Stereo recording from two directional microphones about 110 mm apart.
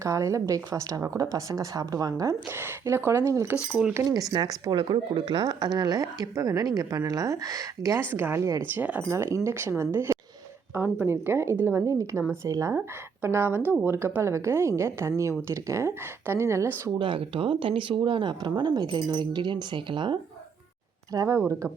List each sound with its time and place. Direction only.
0.0 s a woman's voice: 25° right (ahead or behind)
4.1 s a woman's voice: 35° right (ahead or behind)
8.7 s speech: 15° right (ahead or behind)
9.0 s a woman's voice: 25° right (ahead or behind)
17.0 s speech: 50° right (ahead or behind)
21.1 s speech: 35° right (ahead or behind)
21.3 s a woman's voice: 20° right (ahead or behind)